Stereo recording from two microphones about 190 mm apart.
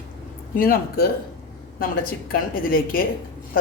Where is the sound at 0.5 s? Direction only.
50° left (ahead or behind).